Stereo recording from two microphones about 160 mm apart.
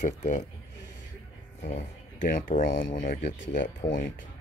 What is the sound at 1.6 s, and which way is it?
Speech, 45° left (ahead or behind).